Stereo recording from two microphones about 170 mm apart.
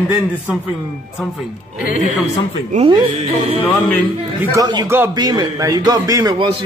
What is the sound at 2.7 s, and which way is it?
Speech, 30° right (ahead or behind).